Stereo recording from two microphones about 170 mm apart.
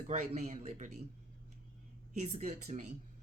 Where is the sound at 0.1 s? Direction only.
40° right (ahead or behind).